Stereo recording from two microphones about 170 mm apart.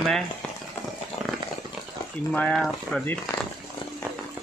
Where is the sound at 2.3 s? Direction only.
5° left (ahead or behind).